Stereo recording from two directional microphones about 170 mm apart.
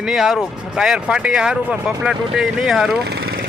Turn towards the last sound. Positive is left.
turn(degrees=-70)  # may be behind; listen again after turning